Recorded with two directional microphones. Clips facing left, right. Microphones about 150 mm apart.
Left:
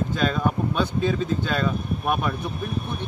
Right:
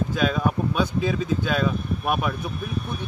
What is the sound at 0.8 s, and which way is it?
Speech, 5° right (ahead or behind).